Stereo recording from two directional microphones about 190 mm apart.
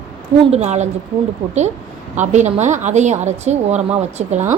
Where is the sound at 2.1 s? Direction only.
40° right (ahead or behind).